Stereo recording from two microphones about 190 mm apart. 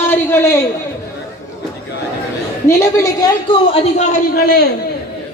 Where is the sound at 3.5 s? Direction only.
30° left (ahead or behind).